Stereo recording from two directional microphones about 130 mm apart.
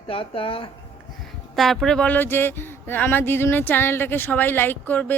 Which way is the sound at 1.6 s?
Centre (ahead or behind).